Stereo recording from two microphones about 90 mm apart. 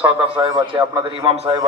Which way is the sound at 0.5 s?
65° right (ahead or behind).